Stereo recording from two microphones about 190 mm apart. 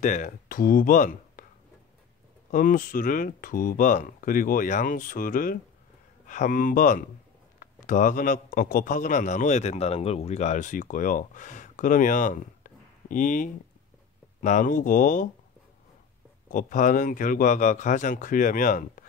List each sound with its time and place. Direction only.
0.0 s speech: 45° left (ahead or behind)
2.5 s a man's voice: 45° left (ahead or behind)
16.4 s a man's voice: 40° left (ahead or behind)